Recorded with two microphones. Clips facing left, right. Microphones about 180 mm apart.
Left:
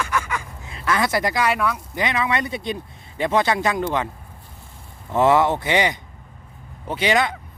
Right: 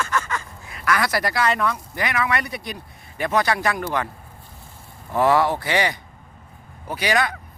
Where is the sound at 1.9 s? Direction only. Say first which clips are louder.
Left 3 dB; 20° left (ahead or behind).